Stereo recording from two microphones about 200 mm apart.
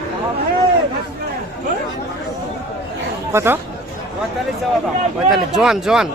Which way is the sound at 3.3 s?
10° right (ahead or behind).